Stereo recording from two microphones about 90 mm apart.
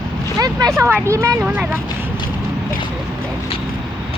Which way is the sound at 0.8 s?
25° right (ahead or behind).